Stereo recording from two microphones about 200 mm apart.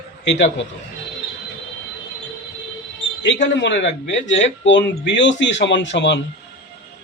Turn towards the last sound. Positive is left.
turn(degrees=65)  # may be behind; listen again after turning